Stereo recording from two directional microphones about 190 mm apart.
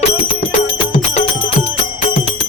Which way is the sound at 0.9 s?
35° left (ahead or behind).